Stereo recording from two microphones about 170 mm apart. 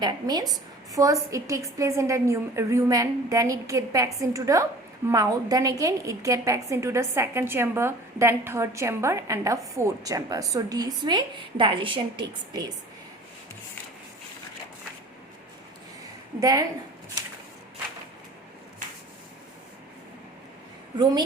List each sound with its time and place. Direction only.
0.0 s a woman's voice: 25° right (ahead or behind)
16.4 s a woman's voice: 20° right (ahead or behind)